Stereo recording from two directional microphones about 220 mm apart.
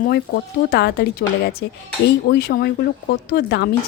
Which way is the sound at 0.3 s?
40° left (ahead or behind).